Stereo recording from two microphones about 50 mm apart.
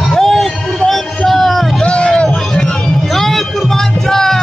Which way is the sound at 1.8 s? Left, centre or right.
Left.